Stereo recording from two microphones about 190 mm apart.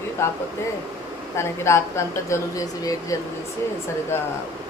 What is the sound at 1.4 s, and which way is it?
Speech, 15° left (ahead or behind).